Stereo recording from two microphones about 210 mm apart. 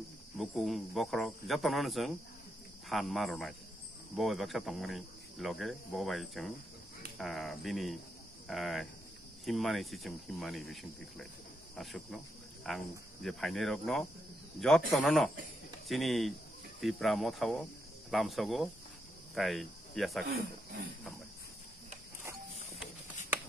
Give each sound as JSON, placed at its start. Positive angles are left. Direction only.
{"t": 0.4, "sound": "speech", "side_deg": 0}